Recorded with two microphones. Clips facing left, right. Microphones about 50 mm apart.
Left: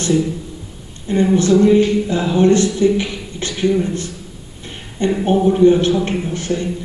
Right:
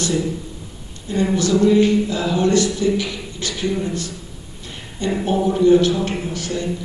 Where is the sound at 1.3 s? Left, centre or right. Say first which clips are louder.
Left 3 dB; left.